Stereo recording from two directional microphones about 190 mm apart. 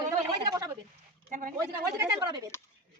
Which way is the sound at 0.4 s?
20° right (ahead or behind).